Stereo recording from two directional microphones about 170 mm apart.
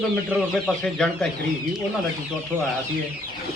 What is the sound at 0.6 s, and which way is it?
Speech, 5° left (ahead or behind).